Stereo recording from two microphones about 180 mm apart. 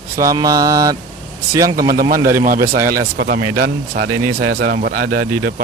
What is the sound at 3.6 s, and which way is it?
Speech, 65° right (ahead or behind).